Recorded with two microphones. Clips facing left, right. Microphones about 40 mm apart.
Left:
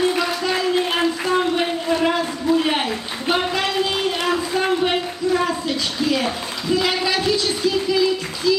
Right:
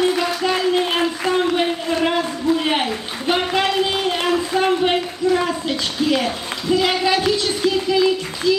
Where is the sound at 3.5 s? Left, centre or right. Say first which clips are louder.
Right 2 dB; right.